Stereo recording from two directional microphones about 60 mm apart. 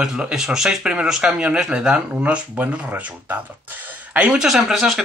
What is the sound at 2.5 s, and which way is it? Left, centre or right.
Speech, right.